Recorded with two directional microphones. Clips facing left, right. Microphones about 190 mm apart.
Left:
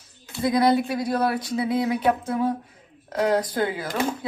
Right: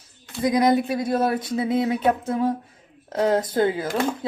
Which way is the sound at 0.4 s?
20° right (ahead or behind).